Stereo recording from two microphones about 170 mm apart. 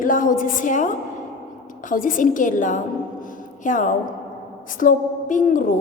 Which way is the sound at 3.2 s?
50° left (ahead or behind).